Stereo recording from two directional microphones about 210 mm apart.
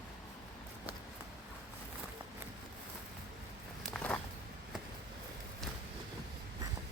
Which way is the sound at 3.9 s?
5° left (ahead or behind).